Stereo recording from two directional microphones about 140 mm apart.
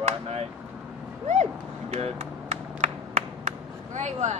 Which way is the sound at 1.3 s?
50° right (ahead or behind).